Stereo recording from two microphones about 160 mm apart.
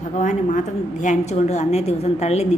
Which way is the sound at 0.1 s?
50° left (ahead or behind).